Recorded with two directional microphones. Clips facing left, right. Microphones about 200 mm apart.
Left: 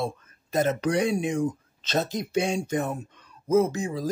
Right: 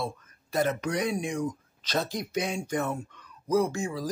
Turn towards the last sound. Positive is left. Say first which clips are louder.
# left 3 dB
turn(degrees=20)  # may be behind; listen again after turning